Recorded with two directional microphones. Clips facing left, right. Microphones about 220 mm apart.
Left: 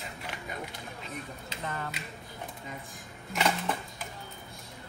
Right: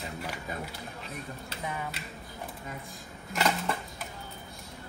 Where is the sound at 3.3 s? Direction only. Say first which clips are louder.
Even; centre (ahead or behind).